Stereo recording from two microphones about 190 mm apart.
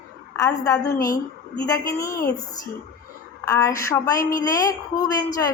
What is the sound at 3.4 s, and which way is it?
A woman's voice, 15° left (ahead or behind).